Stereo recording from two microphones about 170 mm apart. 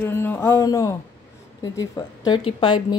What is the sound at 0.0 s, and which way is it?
Speech, 15° left (ahead or behind).